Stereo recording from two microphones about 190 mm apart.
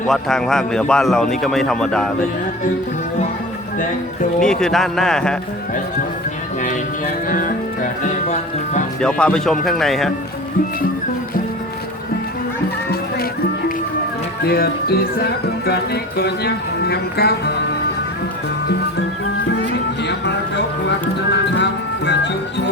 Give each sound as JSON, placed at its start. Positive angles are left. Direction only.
{"t": 0.1, "sound": "a man's voice", "side_deg": 0}
{"t": 4.4, "sound": "a man's voice", "side_deg": 5}
{"t": 7.3, "sound": "music", "side_deg": 45}
{"t": 9.0, "sound": "a man's voice", "side_deg": 5}
{"t": 14.4, "sound": "speech", "side_deg": 55}
{"t": 19.7, "sound": "a sound", "side_deg": 65}
{"t": 21.3, "sound": "music", "side_deg": 65}